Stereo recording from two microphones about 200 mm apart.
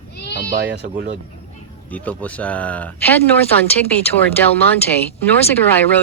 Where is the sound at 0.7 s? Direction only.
55° right (ahead or behind).